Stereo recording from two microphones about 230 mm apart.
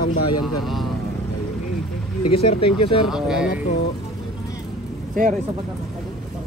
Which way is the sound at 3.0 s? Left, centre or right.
Centre.